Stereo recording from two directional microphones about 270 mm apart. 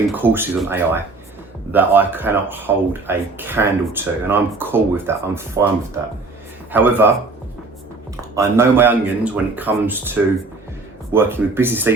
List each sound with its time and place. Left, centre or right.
0.1 s speech: centre
8.1 s speech: centre
11.1 s speech: centre